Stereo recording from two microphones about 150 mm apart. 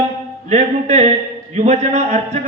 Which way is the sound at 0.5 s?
50° right (ahead or behind).